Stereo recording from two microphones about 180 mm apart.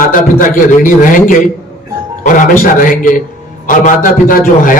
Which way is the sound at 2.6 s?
50° left (ahead or behind).